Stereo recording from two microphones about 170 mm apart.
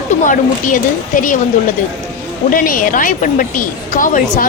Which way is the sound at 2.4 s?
55° left (ahead or behind).